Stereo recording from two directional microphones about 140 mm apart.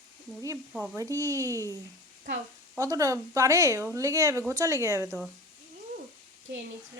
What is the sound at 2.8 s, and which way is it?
Speech, 25° right (ahead or behind).